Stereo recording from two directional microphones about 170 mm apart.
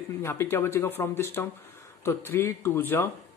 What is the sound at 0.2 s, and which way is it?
A woman's voice, 15° left (ahead or behind).